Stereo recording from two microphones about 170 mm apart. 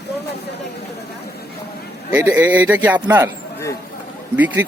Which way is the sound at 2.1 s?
10° right (ahead or behind).